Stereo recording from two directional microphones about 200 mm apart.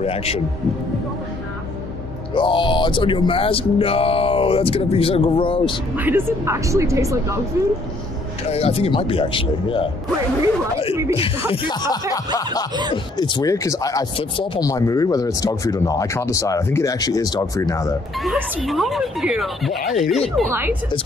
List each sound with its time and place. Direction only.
0.0 s speech: 30° left (ahead or behind)
2.3 s speech: 25° left (ahead or behind)
5.9 s speech: 10° right (ahead or behind)
8.5 s speech: 30° left (ahead or behind)
11.1 s speech: 25° left (ahead or behind)
18.2 s speech: centre (ahead or behind)